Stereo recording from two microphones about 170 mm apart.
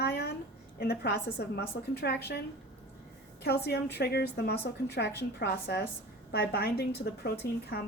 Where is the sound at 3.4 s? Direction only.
75° left (ahead or behind).